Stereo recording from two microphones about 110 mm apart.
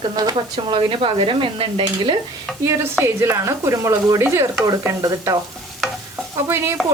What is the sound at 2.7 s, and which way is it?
Speech, 25° right (ahead or behind).